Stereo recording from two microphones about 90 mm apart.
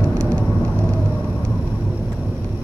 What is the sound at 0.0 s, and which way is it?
Vehicle, 15° left (ahead or behind).